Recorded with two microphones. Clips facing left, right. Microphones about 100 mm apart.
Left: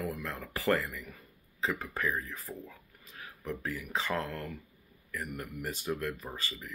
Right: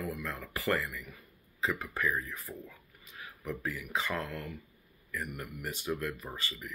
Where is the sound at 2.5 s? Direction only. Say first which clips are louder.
Left 1 dB; 20° left (ahead or behind).